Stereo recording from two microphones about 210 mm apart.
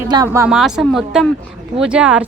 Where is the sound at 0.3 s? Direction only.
10° right (ahead or behind).